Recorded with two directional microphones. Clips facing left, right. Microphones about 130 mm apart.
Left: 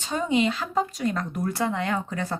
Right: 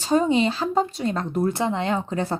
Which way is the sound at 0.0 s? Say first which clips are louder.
Right 4 dB; 35° right (ahead or behind).